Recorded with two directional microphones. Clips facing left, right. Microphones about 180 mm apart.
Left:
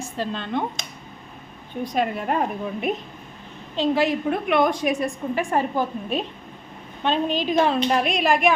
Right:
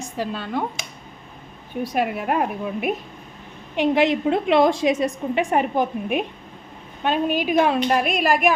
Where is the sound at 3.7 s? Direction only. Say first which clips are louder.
Right 2 dB; 20° right (ahead or behind).